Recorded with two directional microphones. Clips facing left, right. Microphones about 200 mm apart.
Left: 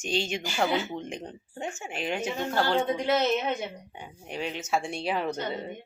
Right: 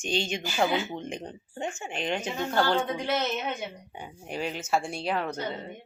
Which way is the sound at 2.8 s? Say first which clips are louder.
Left 3 dB; 20° left (ahead or behind).